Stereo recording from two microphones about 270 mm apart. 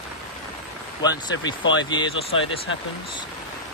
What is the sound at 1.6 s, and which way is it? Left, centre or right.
Speech, left.